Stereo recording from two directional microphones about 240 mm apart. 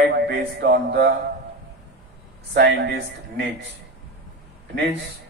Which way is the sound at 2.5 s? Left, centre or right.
Right.